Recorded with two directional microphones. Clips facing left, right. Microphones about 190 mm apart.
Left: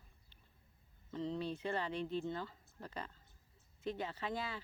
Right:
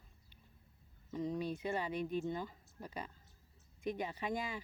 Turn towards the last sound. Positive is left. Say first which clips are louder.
# right 2 dB
turn(degrees=-15)  # may be behind; listen again after turning